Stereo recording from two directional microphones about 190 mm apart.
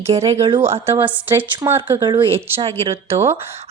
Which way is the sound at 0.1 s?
35° right (ahead or behind).